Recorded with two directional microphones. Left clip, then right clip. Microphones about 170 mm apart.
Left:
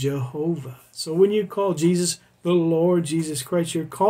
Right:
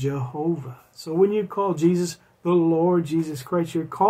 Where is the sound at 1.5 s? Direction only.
20° left (ahead or behind).